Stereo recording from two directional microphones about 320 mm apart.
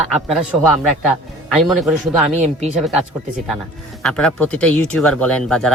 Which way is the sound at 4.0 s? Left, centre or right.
Centre.